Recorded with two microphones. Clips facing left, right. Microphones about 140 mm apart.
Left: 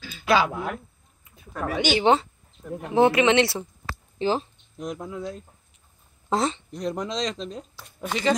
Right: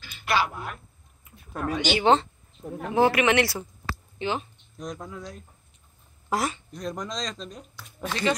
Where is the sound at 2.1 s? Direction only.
20° left (ahead or behind); by 4.5 s 35° left (ahead or behind).